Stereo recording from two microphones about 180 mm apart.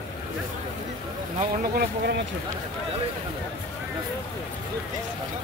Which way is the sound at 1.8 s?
65° right (ahead or behind).